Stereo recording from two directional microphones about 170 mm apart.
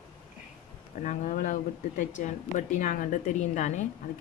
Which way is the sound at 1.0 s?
50° left (ahead or behind).